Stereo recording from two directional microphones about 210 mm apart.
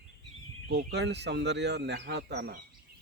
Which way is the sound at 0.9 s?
55° right (ahead or behind).